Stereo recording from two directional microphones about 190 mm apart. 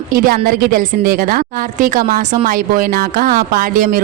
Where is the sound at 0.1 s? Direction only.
50° right (ahead or behind).